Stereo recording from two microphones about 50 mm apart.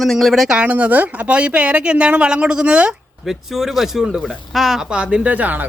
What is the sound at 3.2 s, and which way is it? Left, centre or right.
Speech, centre.